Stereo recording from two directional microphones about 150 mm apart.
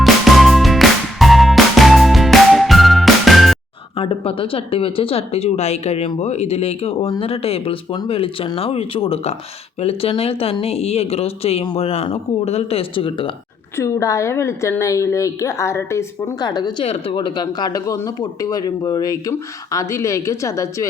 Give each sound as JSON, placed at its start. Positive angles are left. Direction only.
{"t": 0.0, "sound": "music", "side_deg": 0}
{"t": 3.9, "sound": "speech", "side_deg": 40}
{"t": 13.7, "sound": "speech", "side_deg": 20}
{"t": 16.8, "sound": "speech", "side_deg": 40}